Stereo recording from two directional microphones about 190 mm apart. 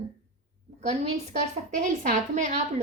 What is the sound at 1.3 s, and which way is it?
A woman's voice, 40° right (ahead or behind).